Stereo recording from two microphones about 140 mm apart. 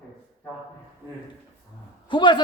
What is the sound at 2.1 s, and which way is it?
Speech, 35° left (ahead or behind).